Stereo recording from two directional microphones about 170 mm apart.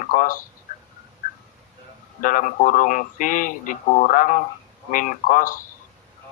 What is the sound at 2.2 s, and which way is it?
Speech, 50° left (ahead or behind).